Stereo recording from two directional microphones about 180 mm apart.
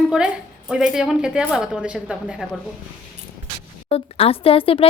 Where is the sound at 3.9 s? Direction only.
35° left (ahead or behind).